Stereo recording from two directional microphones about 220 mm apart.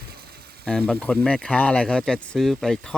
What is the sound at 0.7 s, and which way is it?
Speech, 5° left (ahead or behind).